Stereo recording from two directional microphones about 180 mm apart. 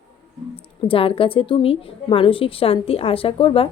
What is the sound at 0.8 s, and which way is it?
A woman's voice, 30° left (ahead or behind).